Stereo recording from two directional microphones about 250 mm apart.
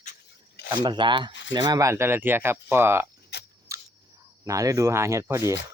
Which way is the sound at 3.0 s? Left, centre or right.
Left.